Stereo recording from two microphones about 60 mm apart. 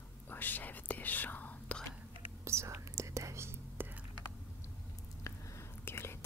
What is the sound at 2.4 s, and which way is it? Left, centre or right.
Whispering, right.